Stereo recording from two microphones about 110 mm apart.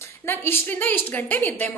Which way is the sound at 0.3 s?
20° left (ahead or behind).